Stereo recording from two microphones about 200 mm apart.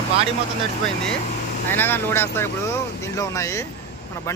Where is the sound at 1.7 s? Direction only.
10° left (ahead or behind).